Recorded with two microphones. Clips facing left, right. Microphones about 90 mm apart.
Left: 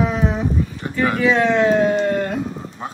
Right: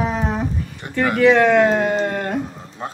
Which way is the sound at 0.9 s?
60° right (ahead or behind).